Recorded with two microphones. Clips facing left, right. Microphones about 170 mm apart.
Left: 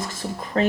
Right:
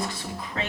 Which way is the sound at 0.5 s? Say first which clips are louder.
Left 12 dB; 40° left (ahead or behind).